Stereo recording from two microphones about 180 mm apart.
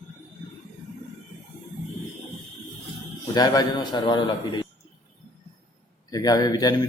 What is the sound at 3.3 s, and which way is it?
Speech, 25° left (ahead or behind).